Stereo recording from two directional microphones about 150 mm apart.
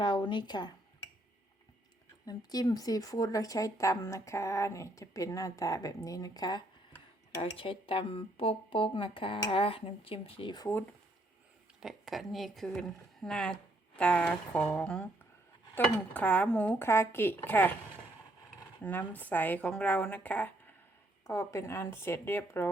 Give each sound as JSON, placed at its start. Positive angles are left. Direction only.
{"t": 0.0, "sound": "speech", "side_deg": 30}
{"t": 2.2, "sound": "a woman's voice", "side_deg": 25}
{"t": 7.5, "sound": "speech", "side_deg": 35}
{"t": 11.8, "sound": "speech", "side_deg": 0}
{"t": 18.8, "sound": "speech", "side_deg": 10}